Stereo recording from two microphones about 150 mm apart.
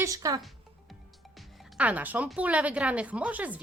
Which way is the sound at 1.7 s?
10° right (ahead or behind).